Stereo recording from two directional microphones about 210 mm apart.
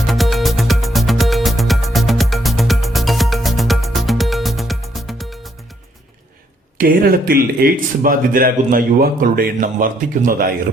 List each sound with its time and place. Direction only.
0.1 s music: centre (ahead or behind)
6.7 s speech: 40° right (ahead or behind)